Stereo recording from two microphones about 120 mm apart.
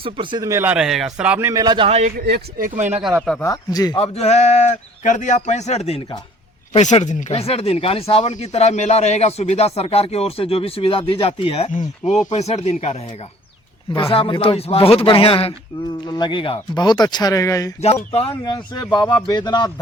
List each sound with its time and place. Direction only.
0.0 s speech: 45° right (ahead or behind)
0.4 s speech: 25° right (ahead or behind)
0.7 s a man's voice: 5° right (ahead or behind)
1.5 s a man's voice: 35° right (ahead or behind)
2.6 s speech: 85° right
3.0 s a man's voice: 10° right (ahead or behind)
3.4 s speech: 30° left (ahead or behind)
3.9 s speech: 60° left (ahead or behind); by 12.2 s 85° left
12.3 s speech: 65° left (ahead or behind)
13.9 s speech: 50° left (ahead or behind)
16.0 s speech: 35° left (ahead or behind)